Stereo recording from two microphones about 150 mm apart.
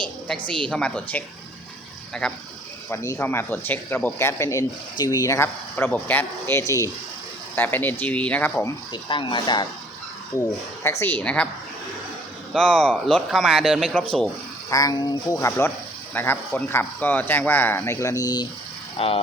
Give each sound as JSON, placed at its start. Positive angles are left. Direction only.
{"t": 0.7, "sound": "speech", "side_deg": 5}
{"t": 2.2, "sound": "speech", "side_deg": 5}
{"t": 2.9, "sound": "speech", "side_deg": 20}
{"t": 8.9, "sound": "speech", "side_deg": 35}
{"t": 10.8, "sound": "speech", "side_deg": 10}
{"t": 12.5, "sound": "speech", "side_deg": 5}
{"t": 14.7, "sound": "speech", "side_deg": 25}
{"t": 18.9, "sound": "speech", "side_deg": 40}